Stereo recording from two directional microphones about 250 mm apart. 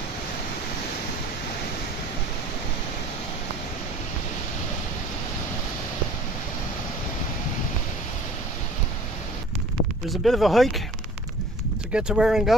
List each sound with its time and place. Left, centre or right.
10.0 s speech: centre
11.9 s speech: centre